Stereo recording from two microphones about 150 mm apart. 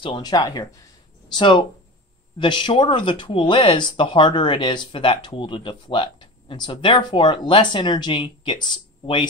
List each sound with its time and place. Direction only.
0.0 s speech: 30° left (ahead or behind)